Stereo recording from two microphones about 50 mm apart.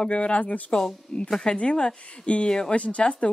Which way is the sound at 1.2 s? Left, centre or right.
Centre.